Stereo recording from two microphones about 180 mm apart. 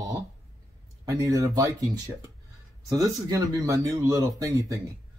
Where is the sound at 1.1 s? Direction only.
20° right (ahead or behind).